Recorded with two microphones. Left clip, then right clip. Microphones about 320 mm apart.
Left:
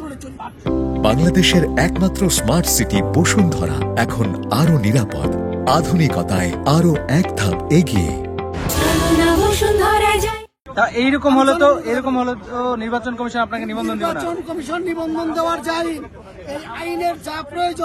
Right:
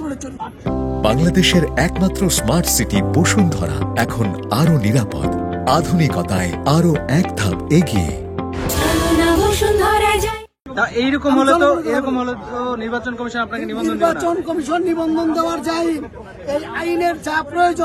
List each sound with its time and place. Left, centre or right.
0.7 s speech: centre
8.6 s music: centre
10.8 s a man's voice: centre